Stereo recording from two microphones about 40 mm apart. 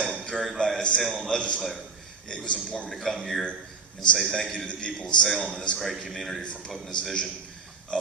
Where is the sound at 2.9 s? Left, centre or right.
Centre.